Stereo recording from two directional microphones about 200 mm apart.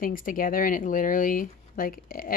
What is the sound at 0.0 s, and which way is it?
Speech, 45° left (ahead or behind).